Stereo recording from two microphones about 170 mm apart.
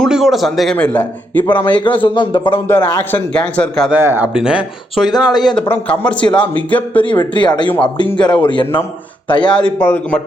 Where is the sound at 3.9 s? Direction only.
10° right (ahead or behind).